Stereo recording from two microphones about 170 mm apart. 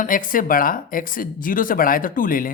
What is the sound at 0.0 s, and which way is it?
Speech, 55° left (ahead or behind).